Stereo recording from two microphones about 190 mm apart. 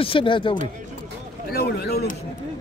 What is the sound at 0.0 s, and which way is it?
Speech, 30° left (ahead or behind).